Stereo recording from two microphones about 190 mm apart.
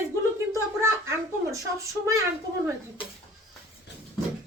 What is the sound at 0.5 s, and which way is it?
A child's voice, 15° right (ahead or behind).